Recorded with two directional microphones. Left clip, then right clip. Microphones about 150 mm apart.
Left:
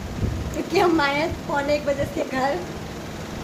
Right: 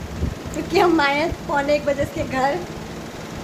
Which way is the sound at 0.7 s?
15° right (ahead or behind).